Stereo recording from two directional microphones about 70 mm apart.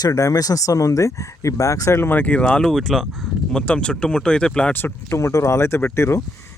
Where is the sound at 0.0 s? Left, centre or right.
Left.